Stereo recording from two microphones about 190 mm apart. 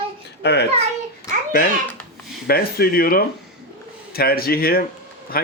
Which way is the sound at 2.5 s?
50° left (ahead or behind).